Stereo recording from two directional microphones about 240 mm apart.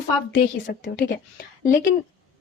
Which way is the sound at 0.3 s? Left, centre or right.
Left.